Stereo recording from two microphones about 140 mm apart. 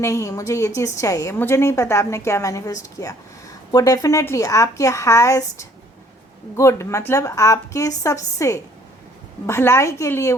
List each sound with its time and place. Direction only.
0.0 s a woman's voice: 20° left (ahead or behind)